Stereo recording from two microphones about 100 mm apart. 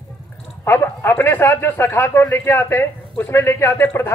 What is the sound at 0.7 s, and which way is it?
Speech, 25° left (ahead or behind).